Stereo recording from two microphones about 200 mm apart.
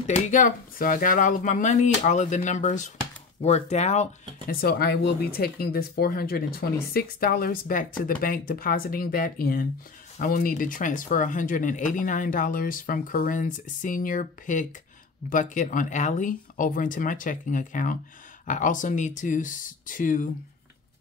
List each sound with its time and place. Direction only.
0.0 s speech: 40° left (ahead or behind)
4.6 s speech: 50° left (ahead or behind)